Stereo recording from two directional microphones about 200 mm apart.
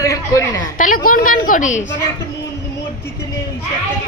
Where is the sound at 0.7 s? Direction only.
45° left (ahead or behind).